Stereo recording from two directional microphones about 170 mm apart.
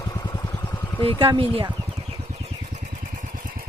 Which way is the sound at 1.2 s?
30° right (ahead or behind).